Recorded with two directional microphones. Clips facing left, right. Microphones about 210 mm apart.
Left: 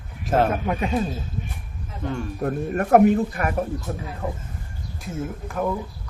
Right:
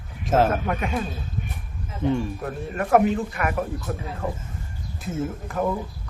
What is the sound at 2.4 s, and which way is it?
Speech, 50° left (ahead or behind).